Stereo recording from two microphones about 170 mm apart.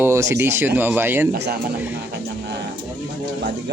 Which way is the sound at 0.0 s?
15° right (ahead or behind).